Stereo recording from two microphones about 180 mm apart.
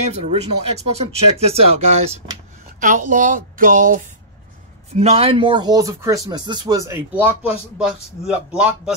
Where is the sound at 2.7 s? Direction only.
45° right (ahead or behind).